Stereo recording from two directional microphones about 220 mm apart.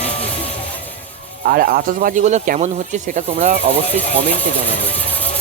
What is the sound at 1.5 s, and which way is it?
Speech, 40° right (ahead or behind).